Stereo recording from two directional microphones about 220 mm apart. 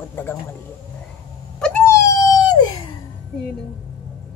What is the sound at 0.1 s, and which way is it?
Speech, 10° left (ahead or behind).